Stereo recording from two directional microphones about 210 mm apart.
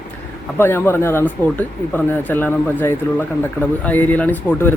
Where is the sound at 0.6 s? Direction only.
10° left (ahead or behind).